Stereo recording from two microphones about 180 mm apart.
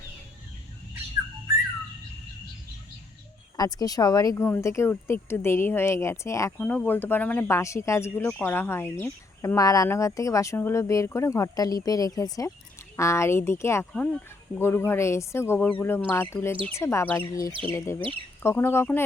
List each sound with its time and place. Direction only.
3.6 s speech: 20° left (ahead or behind)